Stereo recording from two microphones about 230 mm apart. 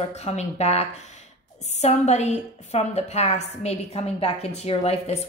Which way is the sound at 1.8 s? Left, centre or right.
Left.